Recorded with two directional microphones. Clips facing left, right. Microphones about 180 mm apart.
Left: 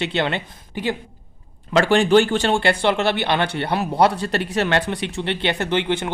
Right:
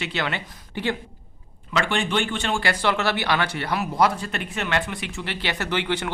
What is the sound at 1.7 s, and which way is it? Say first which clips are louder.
Speech: left 9 dB; 40° left (ahead or behind).